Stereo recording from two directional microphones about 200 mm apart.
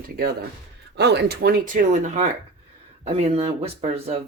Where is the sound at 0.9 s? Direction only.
55° right (ahead or behind).